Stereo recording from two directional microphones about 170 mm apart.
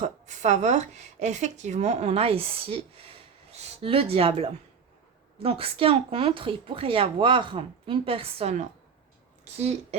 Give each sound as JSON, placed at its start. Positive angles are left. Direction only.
{"t": 0.0, "sound": "a woman's voice", "side_deg": -45}